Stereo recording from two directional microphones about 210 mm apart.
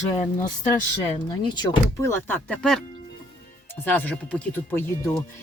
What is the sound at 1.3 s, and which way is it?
Speech, 20° left (ahead or behind).